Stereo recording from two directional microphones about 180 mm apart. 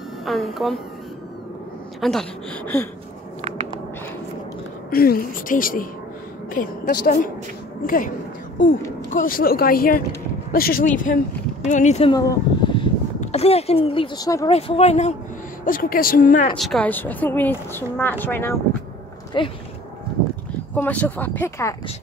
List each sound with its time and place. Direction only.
0.2 s a woman's voice: centre (ahead or behind)
2.0 s speech: 5° left (ahead or behind)
4.9 s a woman's voice: 55° left (ahead or behind)
9.1 s a woman's voice: 50° left (ahead or behind)
12.1 s a sound: 20° left (ahead or behind)
13.2 s speech: 35° left (ahead or behind); by 14.5 s 20° left (ahead or behind)
14.5 s speech: 35° left (ahead or behind)
15.6 s a woman's voice: 50° left (ahead or behind)
16.5 s speech: centre (ahead or behind)
19.3 s speech: 25° left (ahead or behind)
20.7 s speech: 10° left (ahead or behind)